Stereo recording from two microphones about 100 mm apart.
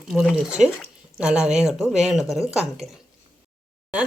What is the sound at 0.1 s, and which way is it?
Speech, centre (ahead or behind).